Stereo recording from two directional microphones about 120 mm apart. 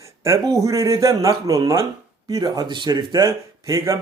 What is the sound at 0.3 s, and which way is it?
Speech, 30° right (ahead or behind).